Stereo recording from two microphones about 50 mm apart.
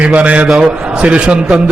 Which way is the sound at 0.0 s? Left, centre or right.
Right.